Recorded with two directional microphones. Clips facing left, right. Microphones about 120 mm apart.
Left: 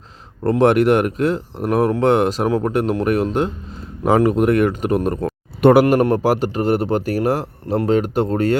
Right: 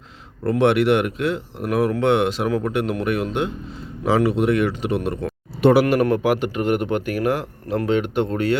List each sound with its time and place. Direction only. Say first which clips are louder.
0.6 s speech: left 3 dB; 40° left (ahead or behind)
4.0 s speech: left 3 dB; 50° left (ahead or behind)
6.0 s speech: left 2 dB; 35° left (ahead or behind)